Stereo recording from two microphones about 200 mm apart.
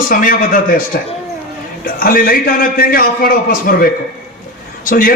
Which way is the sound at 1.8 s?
45° left (ahead or behind).